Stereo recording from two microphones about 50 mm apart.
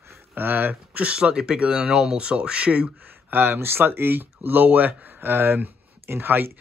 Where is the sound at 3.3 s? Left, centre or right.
Right.